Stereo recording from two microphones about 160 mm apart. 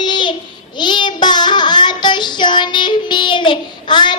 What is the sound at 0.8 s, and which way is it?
Child singing, 30° left (ahead or behind).